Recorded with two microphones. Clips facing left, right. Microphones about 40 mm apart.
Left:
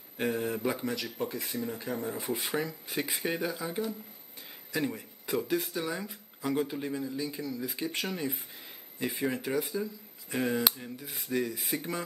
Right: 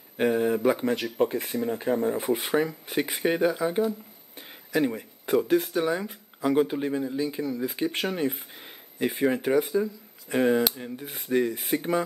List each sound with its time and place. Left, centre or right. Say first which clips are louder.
0.2 s speech: right 8 dB; right
0.7 s speech: right 9 dB; right
4.4 s a sound: right 7 dB; right
5.3 s speech: right 8 dB; right
9.4 s speech: right 8 dB; right
10.3 s speech: right 7 dB; right